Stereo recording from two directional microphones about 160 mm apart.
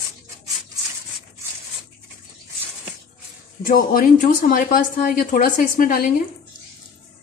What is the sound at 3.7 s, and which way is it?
A woman's voice, 75° left (ahead or behind).